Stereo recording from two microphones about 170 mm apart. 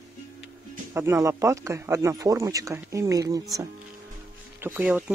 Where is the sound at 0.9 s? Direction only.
15° right (ahead or behind).